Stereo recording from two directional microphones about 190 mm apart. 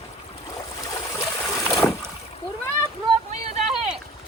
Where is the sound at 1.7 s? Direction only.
15° left (ahead or behind).